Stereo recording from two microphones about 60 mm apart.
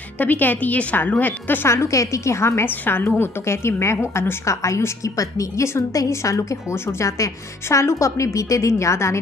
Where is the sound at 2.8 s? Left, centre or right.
Left.